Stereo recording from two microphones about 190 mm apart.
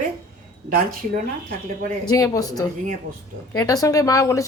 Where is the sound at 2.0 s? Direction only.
20° left (ahead or behind).